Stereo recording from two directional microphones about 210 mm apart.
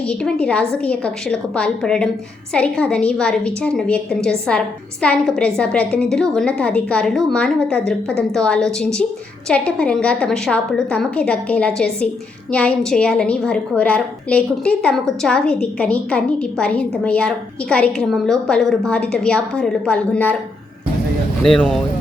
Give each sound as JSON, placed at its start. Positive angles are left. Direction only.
{"t": 0.0, "sound": "a woman's voice", "side_deg": 5}
{"t": 21.4, "sound": "a woman's voice", "side_deg": 5}